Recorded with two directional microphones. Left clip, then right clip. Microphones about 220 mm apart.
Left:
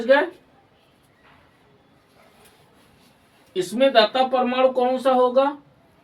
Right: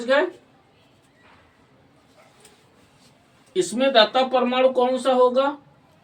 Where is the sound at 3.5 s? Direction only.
20° right (ahead or behind).